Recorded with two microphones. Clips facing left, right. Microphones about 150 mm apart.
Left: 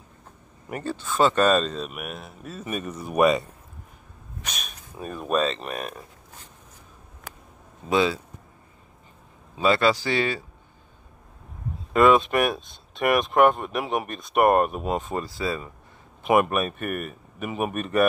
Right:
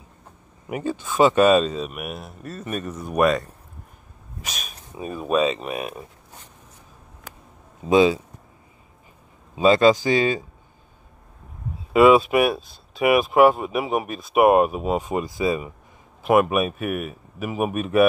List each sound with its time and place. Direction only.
0.7 s speech: 10° right (ahead or behind)
4.5 s speech: centre (ahead or behind)
7.9 s speech: 20° right (ahead or behind)
9.6 s speech: 20° right (ahead or behind)
11.9 s speech: 5° right (ahead or behind)
15.0 s speech: 15° right (ahead or behind)
16.3 s speech: 5° right (ahead or behind)